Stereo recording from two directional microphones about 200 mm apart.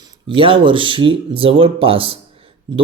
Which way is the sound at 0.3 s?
25° right (ahead or behind).